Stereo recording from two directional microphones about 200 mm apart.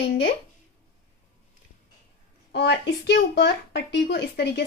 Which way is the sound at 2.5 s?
55° left (ahead or behind).